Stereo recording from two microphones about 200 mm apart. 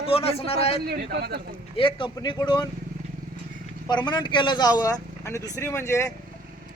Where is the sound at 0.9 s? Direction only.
55° right (ahead or behind).